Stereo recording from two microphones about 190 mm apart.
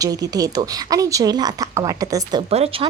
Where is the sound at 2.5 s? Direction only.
30° right (ahead or behind).